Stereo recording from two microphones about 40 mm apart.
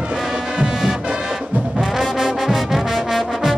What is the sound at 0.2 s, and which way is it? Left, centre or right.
Music, centre.